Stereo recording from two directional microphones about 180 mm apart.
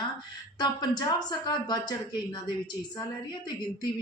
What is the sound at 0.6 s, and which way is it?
Speech, 25° left (ahead or behind).